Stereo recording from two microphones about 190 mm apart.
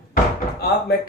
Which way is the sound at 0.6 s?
55° left (ahead or behind).